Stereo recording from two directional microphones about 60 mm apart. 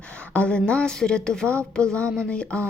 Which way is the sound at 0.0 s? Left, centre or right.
Left.